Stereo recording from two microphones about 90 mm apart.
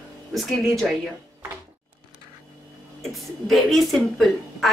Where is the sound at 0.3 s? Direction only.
Centre (ahead or behind).